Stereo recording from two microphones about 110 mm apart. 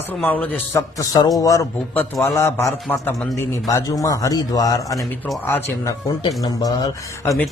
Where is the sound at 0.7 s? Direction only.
30° left (ahead or behind).